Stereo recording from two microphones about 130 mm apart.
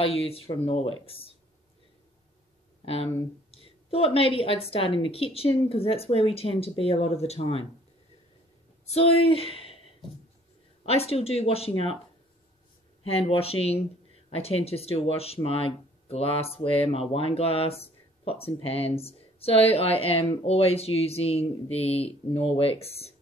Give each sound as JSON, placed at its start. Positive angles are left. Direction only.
{"t": 0.0, "sound": "speech", "side_deg": 50}
{"t": 2.8, "sound": "speech", "side_deg": 50}
{"t": 8.9, "sound": "speech", "side_deg": 45}
{"t": 10.9, "sound": "speech", "side_deg": 50}
{"t": 13.3, "sound": "speech", "side_deg": 50}